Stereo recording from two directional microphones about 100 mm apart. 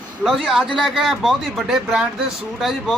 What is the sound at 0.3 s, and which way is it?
Speech, centre (ahead or behind).